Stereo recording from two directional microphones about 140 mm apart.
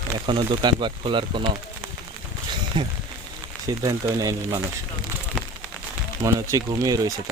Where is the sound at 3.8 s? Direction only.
25° right (ahead or behind).